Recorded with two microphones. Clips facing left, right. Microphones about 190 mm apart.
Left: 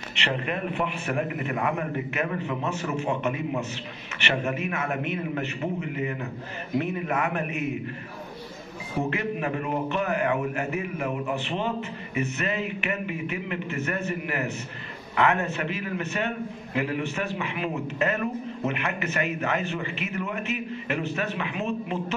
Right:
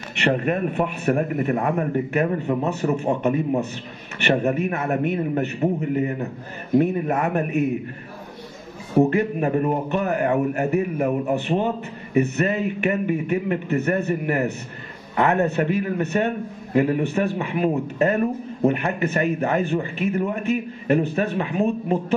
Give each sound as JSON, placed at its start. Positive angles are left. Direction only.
{"t": 0.2, "sound": "a man's voice", "side_deg": -45}
{"t": 8.9, "sound": "a man's voice", "side_deg": -40}